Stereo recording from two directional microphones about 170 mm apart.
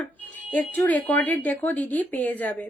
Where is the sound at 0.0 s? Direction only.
10° left (ahead or behind).